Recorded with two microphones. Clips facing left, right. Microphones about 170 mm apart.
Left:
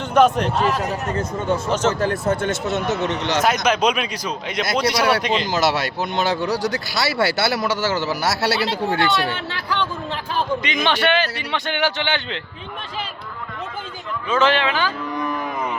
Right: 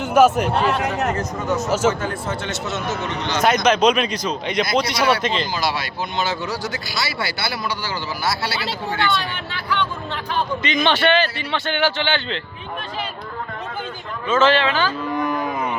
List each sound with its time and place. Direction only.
0.0 s a man's voice: 5° right (ahead or behind)
0.8 s speech: 75° right (ahead or behind)
1.1 s speech: 30° left (ahead or behind)
1.7 s speech: 10° right (ahead or behind)
2.2 s speech: 50° left (ahead or behind)
3.4 s speech: 5° left (ahead or behind)
5.5 s speech: 75° left (ahead or behind)
10.6 s speech: 10° left (ahead or behind)
14.3 s speech: 15° left (ahead or behind)